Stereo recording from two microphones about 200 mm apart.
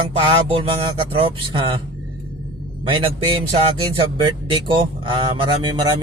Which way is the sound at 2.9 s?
25° right (ahead or behind).